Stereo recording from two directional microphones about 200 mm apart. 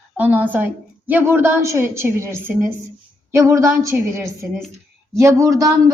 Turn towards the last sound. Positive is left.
turn(degrees=-15)  # may be behind; listen again after turning